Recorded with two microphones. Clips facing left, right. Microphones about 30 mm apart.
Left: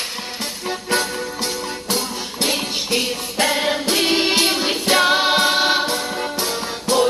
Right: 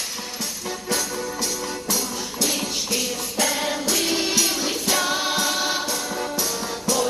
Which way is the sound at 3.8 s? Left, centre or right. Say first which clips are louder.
Left 5 dB; left.